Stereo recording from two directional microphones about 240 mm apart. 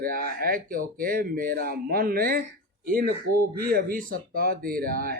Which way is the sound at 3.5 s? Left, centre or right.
Right.